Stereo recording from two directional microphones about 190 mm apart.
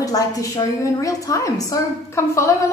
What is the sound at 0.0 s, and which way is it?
A woman's voice, 20° left (ahead or behind).